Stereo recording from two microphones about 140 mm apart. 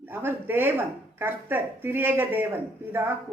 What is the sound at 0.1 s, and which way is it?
Speech, 15° right (ahead or behind).